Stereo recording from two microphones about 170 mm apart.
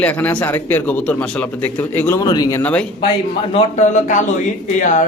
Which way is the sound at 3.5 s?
40° left (ahead or behind).